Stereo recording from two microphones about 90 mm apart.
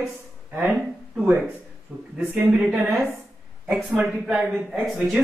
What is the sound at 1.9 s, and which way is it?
Speech, 10° right (ahead or behind).